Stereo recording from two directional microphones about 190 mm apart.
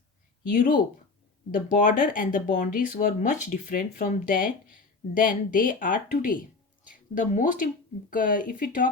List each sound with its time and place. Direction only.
0.4 s speech: 45° left (ahead or behind)